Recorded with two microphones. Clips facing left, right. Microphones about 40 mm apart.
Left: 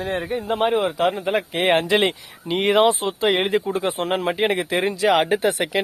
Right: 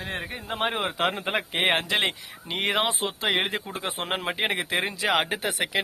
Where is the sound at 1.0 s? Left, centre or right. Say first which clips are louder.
Left 5 dB; right.